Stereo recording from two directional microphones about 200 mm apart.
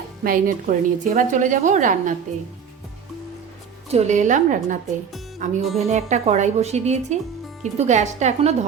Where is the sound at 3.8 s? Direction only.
35° right (ahead or behind).